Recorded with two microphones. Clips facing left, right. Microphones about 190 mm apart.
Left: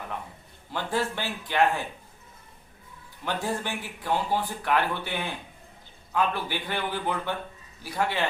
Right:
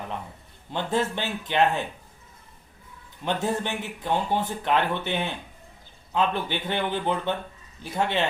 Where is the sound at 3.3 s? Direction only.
20° right (ahead or behind).